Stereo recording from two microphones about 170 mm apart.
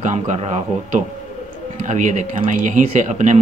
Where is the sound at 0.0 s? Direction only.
45° right (ahead or behind).